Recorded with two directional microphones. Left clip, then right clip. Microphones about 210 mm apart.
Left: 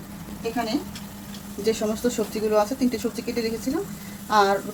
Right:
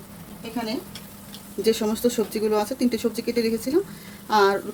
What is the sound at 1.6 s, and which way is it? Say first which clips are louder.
Speech: right 2 dB; 50° right (ahead or behind).